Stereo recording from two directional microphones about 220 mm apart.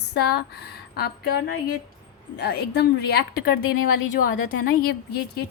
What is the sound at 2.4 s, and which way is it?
A woman's voice, 50° left (ahead or behind).